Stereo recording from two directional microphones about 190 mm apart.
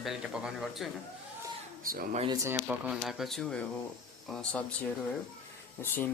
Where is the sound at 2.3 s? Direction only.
15° right (ahead or behind); by 4.9 s 5° left (ahead or behind).